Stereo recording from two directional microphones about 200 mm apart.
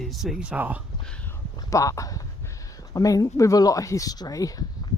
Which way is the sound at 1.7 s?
15° left (ahead or behind).